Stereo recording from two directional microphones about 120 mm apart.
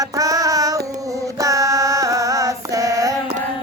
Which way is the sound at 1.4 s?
25° right (ahead or behind).